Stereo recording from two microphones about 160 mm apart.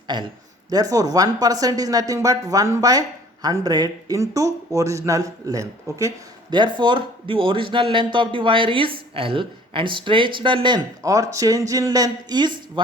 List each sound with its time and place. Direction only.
0.1 s speech: 30° right (ahead or behind)